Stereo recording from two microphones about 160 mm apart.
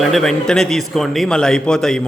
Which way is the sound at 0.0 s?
Centre (ahead or behind).